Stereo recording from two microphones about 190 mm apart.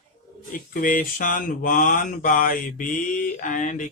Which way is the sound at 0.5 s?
50° left (ahead or behind).